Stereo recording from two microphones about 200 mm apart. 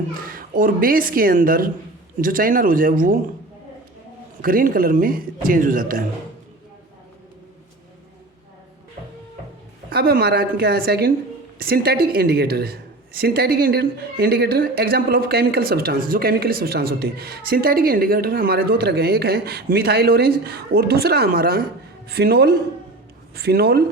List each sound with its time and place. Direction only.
0.3 s a woman's voice: 45° right (ahead or behind)
4.4 s a woman's voice: 45° right (ahead or behind)
9.9 s a woman's voice: 50° right (ahead or behind)